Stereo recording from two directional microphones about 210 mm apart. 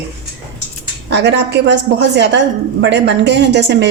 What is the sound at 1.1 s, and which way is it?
Speech, 55° right (ahead or behind).